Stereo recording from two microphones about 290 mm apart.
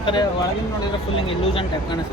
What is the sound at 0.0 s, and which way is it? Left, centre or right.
Speech, centre.